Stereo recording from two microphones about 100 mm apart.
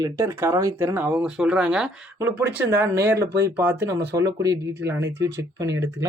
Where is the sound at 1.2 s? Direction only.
10° right (ahead or behind).